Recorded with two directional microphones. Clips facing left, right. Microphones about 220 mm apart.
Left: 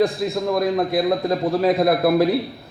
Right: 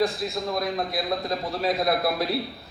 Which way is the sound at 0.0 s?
55° left (ahead or behind).